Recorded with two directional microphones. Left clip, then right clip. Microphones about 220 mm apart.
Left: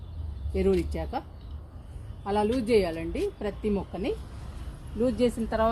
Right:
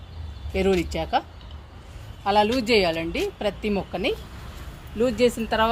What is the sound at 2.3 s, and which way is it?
A woman's voice, 45° right (ahead or behind).